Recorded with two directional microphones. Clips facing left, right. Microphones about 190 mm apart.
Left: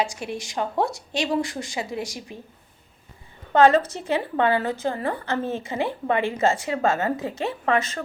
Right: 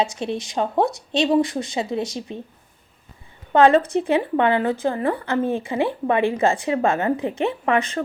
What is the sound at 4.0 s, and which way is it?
A woman's voice, 20° right (ahead or behind).